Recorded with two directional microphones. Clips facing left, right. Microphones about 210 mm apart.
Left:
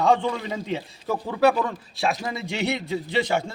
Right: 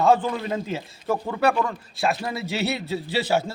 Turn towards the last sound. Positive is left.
turn(degrees=-5)  # may be behind; listen again after turning